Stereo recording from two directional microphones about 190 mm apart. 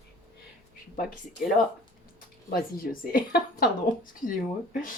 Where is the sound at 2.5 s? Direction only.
50° left (ahead or behind).